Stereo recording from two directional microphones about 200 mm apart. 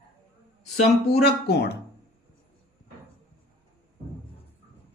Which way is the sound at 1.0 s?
50° left (ahead or behind).